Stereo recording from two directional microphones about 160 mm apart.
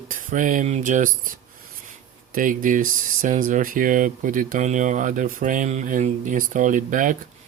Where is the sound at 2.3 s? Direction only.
55° right (ahead or behind).